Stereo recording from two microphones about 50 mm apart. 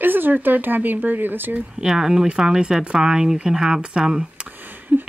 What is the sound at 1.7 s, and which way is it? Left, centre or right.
Speech, centre.